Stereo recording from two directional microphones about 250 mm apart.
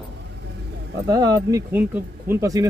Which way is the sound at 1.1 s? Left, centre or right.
Centre.